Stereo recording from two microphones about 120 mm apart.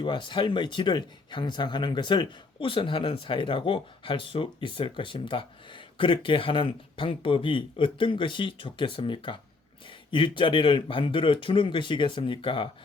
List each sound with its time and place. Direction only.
0.0 s speech: 40° left (ahead or behind)